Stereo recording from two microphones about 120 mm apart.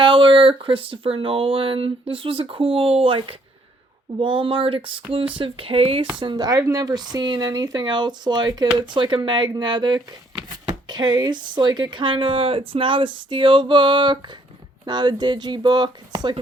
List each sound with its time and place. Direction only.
0.0 s speech: 45° right (ahead or behind)
6.1 s speech: 40° right (ahead or behind)